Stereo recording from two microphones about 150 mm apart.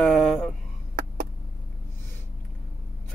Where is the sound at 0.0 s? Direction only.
Centre (ahead or behind).